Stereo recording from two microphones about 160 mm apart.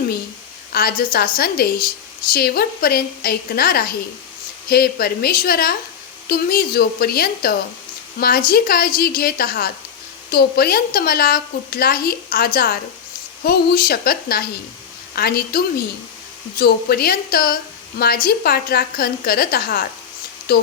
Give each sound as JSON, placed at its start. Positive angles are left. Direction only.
{"t": 0.7, "sound": "a woman's voice", "side_deg": 70}